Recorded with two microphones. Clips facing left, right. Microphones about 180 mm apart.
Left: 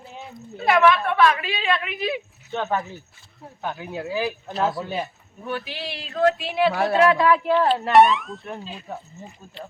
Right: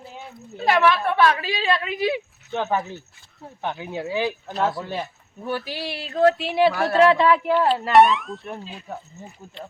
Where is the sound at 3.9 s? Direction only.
20° right (ahead or behind).